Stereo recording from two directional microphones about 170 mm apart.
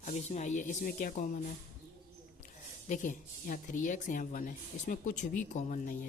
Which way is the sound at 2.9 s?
50° left (ahead or behind).